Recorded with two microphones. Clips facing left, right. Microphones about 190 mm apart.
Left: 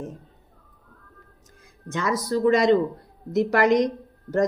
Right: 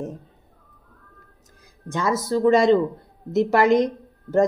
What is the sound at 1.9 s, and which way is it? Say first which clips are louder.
A man's voice: right 2 dB; 25° right (ahead or behind).